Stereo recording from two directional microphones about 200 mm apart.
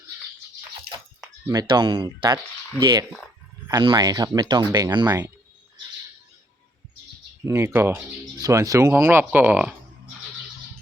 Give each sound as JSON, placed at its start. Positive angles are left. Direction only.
{"t": 1.5, "sound": "speech", "side_deg": -20}
{"t": 7.4, "sound": "speech", "side_deg": -15}